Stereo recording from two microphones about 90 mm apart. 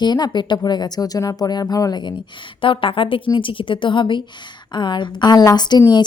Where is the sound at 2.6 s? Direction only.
75° left (ahead or behind).